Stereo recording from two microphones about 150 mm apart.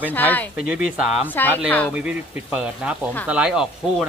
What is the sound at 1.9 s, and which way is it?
Speech, 10° right (ahead or behind).